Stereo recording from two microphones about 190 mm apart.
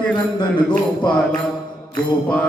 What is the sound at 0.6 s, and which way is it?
Speech, 25° left (ahead or behind).